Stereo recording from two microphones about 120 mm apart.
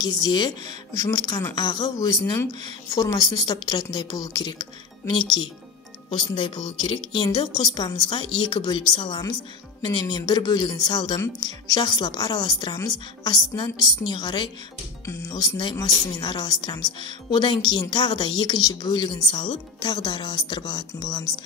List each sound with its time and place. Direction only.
0.0 s speech: 35° left (ahead or behind)